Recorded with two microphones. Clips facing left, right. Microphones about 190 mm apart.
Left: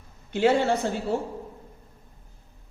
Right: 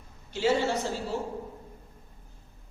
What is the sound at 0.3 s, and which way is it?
Speech, 60° left (ahead or behind).